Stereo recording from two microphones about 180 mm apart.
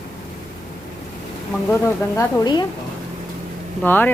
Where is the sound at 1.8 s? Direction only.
20° left (ahead or behind).